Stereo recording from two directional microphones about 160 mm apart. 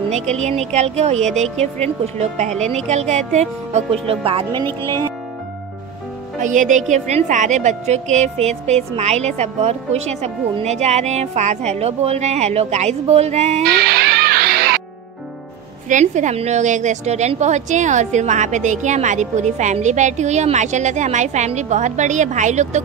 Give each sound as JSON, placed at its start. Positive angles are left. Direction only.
{"t": 0.3, "sound": "a woman's voice", "side_deg": -45}
{"t": 4.6, "sound": "speech", "side_deg": 15}
{"t": 6.4, "sound": "a woman's voice", "side_deg": -50}
{"t": 13.7, "sound": "music", "side_deg": -75}
{"t": 15.9, "sound": "a woman's voice", "side_deg": -50}